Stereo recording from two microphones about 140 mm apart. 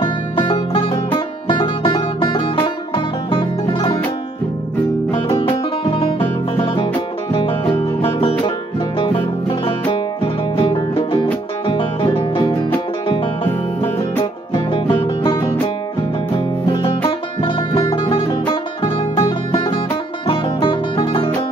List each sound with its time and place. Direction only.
0.0 s music: 40° left (ahead or behind)
5.9 s music: 40° left (ahead or behind)
14.5 s music: 35° left (ahead or behind)
17.4 s music: 40° left (ahead or behind)